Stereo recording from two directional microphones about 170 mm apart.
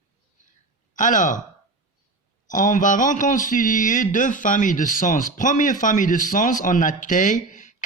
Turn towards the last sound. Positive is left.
turn(degrees=50)  # may be behind; listen again after turning